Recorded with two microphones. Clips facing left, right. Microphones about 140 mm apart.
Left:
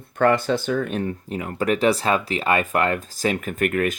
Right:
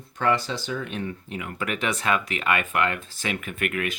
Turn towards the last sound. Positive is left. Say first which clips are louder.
# left 6 dB
turn(degrees=45)  # may be behind; listen again after turning